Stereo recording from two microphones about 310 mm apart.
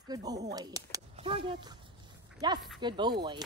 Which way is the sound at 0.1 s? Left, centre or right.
Centre.